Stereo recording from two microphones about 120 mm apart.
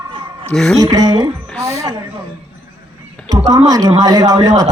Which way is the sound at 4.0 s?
35° right (ahead or behind).